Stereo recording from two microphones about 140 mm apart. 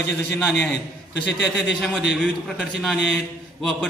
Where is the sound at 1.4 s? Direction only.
Centre (ahead or behind).